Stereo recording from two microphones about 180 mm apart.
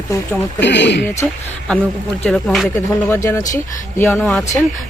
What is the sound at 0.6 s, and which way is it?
Speech, 75° left (ahead or behind).